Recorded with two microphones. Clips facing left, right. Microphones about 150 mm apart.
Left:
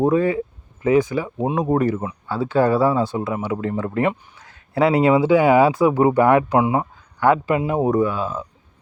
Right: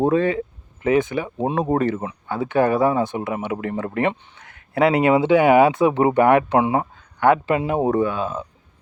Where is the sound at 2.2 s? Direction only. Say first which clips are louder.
Left 1 dB; 20° right (ahead or behind).